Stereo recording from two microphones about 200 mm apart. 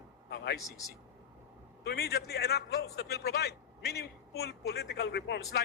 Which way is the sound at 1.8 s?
50° left (ahead or behind).